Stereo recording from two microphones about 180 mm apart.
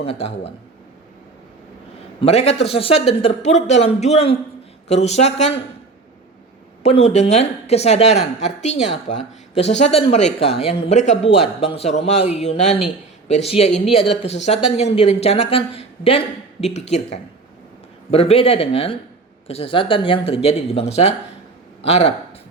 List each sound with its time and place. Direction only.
0.0 s speech: 35° left (ahead or behind)
2.2 s speech: 35° left (ahead or behind)
6.8 s a man's voice: 35° left (ahead or behind)